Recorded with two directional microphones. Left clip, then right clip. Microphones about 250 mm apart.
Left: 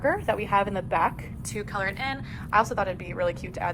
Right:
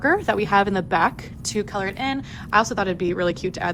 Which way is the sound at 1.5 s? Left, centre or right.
Right.